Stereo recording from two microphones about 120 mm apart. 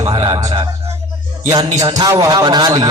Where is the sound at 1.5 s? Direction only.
35° right (ahead or behind).